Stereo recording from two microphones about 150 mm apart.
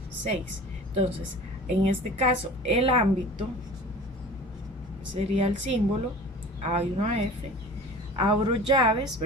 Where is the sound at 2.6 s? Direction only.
40° right (ahead or behind).